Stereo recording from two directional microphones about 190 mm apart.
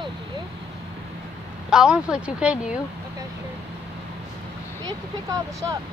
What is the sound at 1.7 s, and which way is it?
Speech, 5° right (ahead or behind).